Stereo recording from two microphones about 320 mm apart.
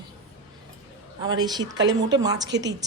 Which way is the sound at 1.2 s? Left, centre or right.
Centre.